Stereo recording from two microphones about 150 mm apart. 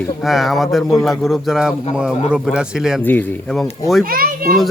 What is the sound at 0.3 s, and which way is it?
Speech, centre (ahead or behind).